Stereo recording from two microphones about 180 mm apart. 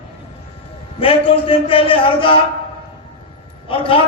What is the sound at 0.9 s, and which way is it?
A man's voice, 30° left (ahead or behind).